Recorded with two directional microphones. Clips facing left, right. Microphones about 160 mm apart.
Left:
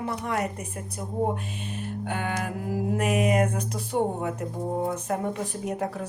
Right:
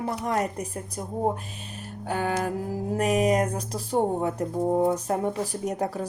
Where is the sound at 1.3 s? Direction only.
40° right (ahead or behind).